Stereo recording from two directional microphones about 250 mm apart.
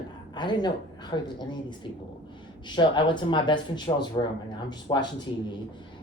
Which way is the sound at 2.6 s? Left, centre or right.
Centre.